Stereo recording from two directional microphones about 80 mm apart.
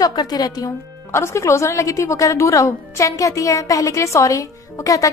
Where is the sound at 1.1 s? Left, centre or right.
Left.